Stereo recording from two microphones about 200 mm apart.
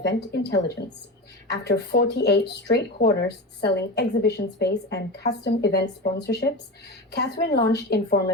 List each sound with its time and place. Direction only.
0.3 s speech: 55° left (ahead or behind)